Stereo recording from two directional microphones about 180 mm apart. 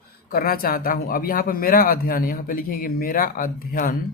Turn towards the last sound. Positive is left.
turn(degrees=50)  # may be behind; listen again after turning